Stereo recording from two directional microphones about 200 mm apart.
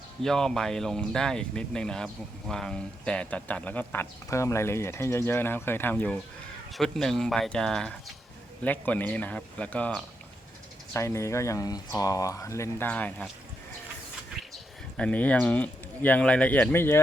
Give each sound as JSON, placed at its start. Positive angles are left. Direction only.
{"t": 0.2, "sound": "speech", "side_deg": 0}
{"t": 14.5, "sound": "speech", "side_deg": 5}